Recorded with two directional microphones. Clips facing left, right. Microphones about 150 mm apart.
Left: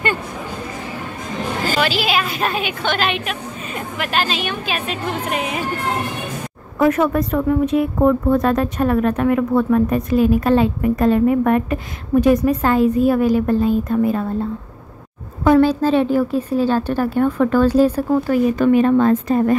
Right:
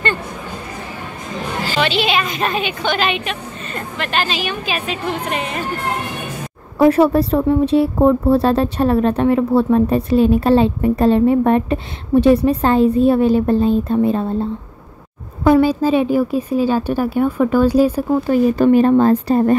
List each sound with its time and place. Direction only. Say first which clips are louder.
1.8 s a woman's voice: right 3 dB; 5° left (ahead or behind)
6.8 s speech: right 4 dB; 30° right (ahead or behind)
15.4 s a woman's voice: right 1 dB; 10° right (ahead or behind)
18.2 s speech: right 4 dB; 30° right (ahead or behind)